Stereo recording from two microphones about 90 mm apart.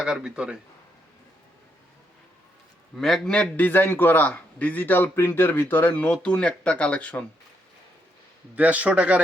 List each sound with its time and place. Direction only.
0.0 s speech: 10° right (ahead or behind)
3.0 s a man's voice: 5° left (ahead or behind)
3.4 s a man's voice: 20° left (ahead or behind)
8.5 s speech: 15° right (ahead or behind)